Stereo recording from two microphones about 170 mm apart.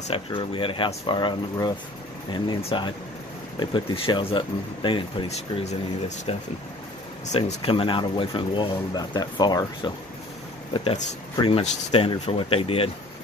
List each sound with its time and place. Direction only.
0.1 s speech: 30° left (ahead or behind)